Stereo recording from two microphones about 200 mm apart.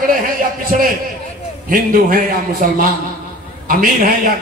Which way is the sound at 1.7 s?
45° right (ahead or behind).